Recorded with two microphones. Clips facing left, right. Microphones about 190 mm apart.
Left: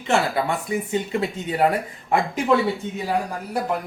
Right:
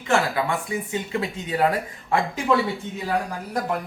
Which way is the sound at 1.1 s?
25° left (ahead or behind).